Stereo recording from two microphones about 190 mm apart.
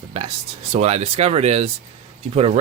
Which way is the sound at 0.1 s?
30° right (ahead or behind).